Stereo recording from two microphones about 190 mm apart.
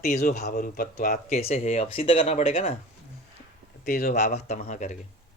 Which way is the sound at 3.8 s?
45° left (ahead or behind).